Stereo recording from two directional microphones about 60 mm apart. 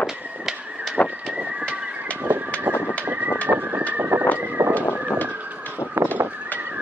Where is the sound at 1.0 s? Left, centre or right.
Left.